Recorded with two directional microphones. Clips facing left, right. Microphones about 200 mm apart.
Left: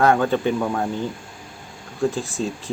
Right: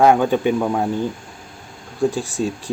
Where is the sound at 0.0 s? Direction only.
15° right (ahead or behind).